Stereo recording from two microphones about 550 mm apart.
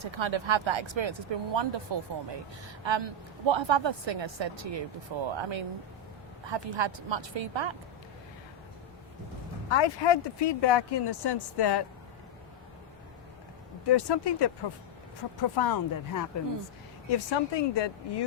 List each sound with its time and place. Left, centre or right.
0.0 s speech: right
9.6 s speech: left
13.8 s speech: left
17.1 s speech: left